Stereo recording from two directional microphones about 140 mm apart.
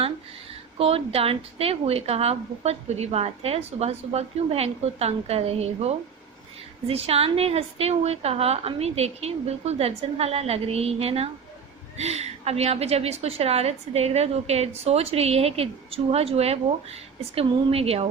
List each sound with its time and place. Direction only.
0.8 s a woman's voice: 45° right (ahead or behind)